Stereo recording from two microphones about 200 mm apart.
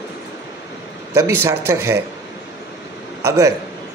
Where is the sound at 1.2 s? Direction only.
15° right (ahead or behind).